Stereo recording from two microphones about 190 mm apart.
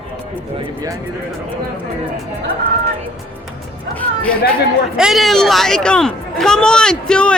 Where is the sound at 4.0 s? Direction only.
5° left (ahead or behind).